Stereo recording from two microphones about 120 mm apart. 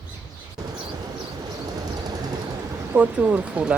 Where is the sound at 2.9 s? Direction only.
10° right (ahead or behind).